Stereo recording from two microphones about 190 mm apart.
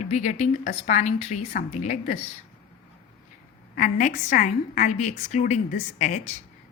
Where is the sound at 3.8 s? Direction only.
45° left (ahead or behind).